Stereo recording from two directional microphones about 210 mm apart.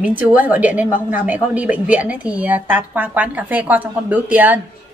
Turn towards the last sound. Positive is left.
turn(degrees=-10)  # may be behind; listen again after turning